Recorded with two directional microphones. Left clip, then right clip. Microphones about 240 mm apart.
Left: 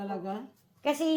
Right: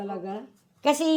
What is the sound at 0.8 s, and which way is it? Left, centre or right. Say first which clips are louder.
Speech: right 6 dB; right.